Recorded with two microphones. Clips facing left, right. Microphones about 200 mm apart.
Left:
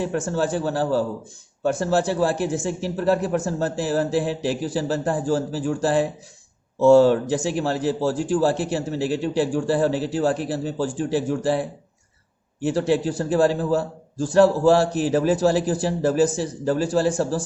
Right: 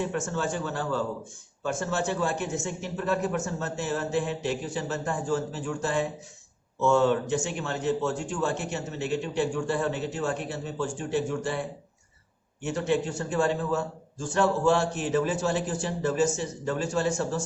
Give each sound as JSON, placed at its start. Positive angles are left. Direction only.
{"t": 0.0, "sound": "a man's voice", "side_deg": 35}
{"t": 12.6, "sound": "a man's voice", "side_deg": 35}